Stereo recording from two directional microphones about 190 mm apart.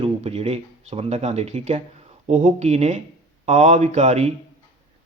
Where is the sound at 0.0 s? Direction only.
30° right (ahead or behind).